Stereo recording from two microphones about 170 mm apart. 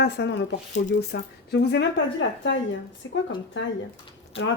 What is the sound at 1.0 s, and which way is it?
A woman's voice, 70° left (ahead or behind).